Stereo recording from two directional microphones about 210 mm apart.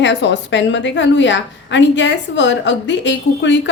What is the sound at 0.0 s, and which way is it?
A woman's voice, 60° left (ahead or behind).